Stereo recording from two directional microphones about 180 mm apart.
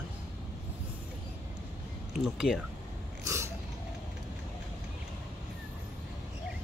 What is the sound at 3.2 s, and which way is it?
Biting, 15° right (ahead or behind).